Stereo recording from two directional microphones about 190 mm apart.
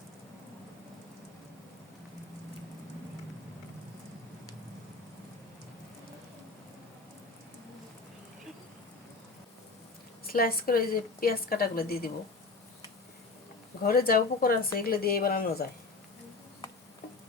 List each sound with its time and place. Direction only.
10.3 s a woman's voice: 50° left (ahead or behind)
13.8 s a woman's voice: 50° left (ahead or behind)